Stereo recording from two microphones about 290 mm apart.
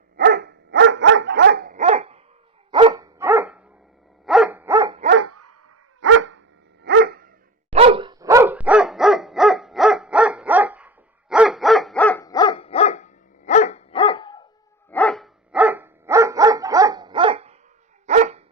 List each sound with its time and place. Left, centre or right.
0.2 s dog: right; by 5.0 s centre
5.1 s dog: right
6.0 s dog: right
7.7 s dog: centre
14.8 s dog: centre; by 18.4 s right